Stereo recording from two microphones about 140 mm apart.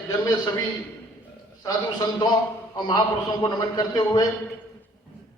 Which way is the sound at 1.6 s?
25° left (ahead or behind).